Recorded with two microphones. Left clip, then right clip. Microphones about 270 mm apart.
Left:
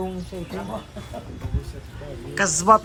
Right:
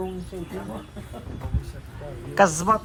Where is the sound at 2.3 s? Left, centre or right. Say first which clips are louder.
Right 4 dB; centre.